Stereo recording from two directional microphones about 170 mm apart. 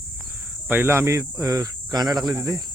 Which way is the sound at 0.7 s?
15° right (ahead or behind).